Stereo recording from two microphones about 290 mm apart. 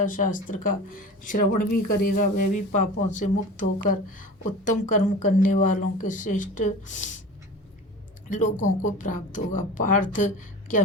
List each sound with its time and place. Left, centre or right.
0.0 s speech: left
8.3 s speech: left